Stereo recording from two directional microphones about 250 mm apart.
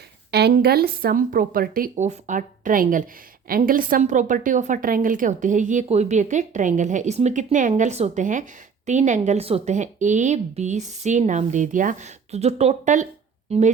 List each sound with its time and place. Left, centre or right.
0.3 s a woman's voice: right